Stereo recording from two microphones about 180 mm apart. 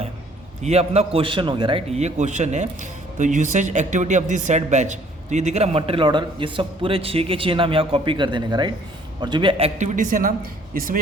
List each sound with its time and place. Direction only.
0.6 s speech: 35° right (ahead or behind)